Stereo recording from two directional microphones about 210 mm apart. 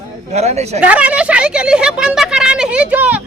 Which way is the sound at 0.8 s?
5° right (ahead or behind).